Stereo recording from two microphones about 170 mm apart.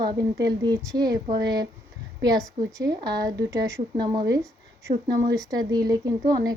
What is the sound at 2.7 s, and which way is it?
Speech, 20° right (ahead or behind).